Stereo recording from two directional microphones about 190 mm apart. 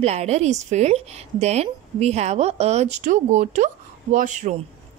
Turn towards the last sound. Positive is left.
turn(degrees=-40)  # may be behind; listen again after turning